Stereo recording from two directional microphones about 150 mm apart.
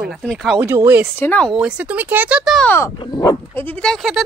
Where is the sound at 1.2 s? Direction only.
10° left (ahead or behind).